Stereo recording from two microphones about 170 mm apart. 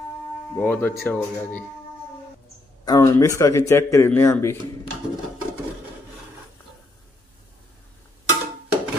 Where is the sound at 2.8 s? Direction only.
20° left (ahead or behind).